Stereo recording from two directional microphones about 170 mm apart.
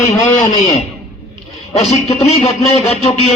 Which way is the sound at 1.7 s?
40° left (ahead or behind).